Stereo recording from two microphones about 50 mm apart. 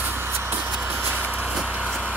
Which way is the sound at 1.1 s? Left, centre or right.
Right.